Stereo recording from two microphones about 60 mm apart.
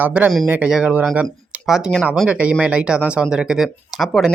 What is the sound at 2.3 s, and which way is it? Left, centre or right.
Speech, right.